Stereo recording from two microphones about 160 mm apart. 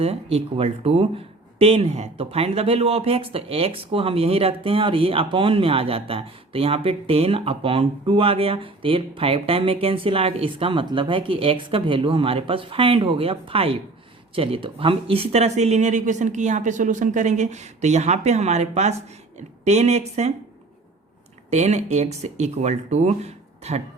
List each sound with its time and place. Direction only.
0.0 s speech: 40° right (ahead or behind)
21.5 s speech: 45° right (ahead or behind)